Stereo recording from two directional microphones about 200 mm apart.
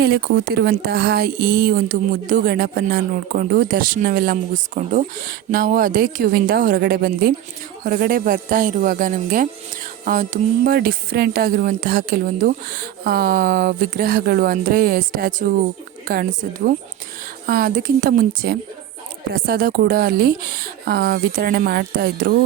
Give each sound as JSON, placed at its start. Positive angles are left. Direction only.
{"t": 0.0, "sound": "speech", "side_deg": -50}